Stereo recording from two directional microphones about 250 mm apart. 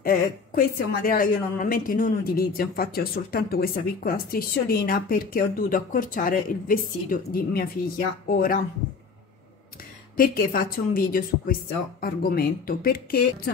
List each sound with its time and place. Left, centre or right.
0.0 s a woman's voice: left
10.1 s a woman's voice: left